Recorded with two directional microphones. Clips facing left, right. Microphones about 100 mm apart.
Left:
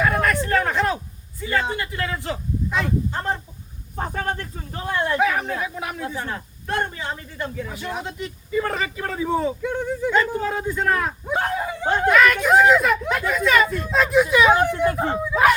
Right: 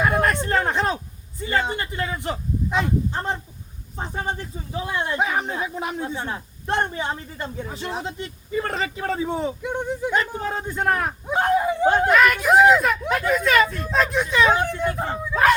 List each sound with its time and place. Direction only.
0.1 s a sound: 20° right (ahead or behind)
1.5 s a man's voice: 20° right (ahead or behind)
3.9 s speech: 55° left (ahead or behind)
4.9 s a man's voice: 20° right (ahead or behind)
12.0 s speech: 5° right (ahead or behind)